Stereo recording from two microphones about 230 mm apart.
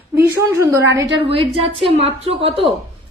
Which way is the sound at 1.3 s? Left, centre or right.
Right.